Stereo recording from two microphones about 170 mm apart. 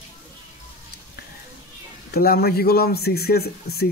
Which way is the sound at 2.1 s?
65° left (ahead or behind).